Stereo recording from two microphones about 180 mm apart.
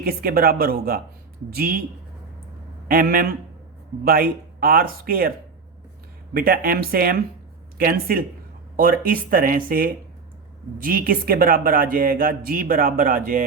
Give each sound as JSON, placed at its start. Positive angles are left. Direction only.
{"t": 0.0, "sound": "speech", "side_deg": -60}
{"t": 2.8, "sound": "speech", "side_deg": -55}
{"t": 6.3, "sound": "speech", "side_deg": -55}